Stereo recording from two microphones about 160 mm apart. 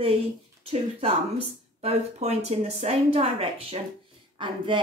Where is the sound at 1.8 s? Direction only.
40° right (ahead or behind).